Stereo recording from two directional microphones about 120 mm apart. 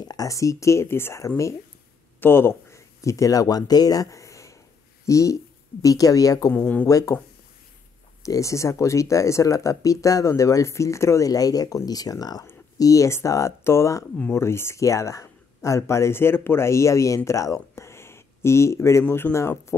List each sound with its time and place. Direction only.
0.0 s speech: 30° left (ahead or behind)
6.5 s speech: 10° left (ahead or behind)
6.9 s speech: 30° left (ahead or behind)
8.2 s speech: 25° left (ahead or behind)